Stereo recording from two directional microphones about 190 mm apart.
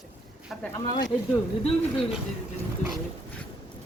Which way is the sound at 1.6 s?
Centre (ahead or behind).